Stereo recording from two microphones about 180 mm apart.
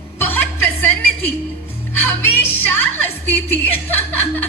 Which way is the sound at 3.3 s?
10° left (ahead or behind).